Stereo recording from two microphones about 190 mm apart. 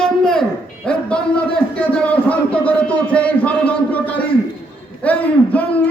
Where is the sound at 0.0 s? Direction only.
5° left (ahead or behind).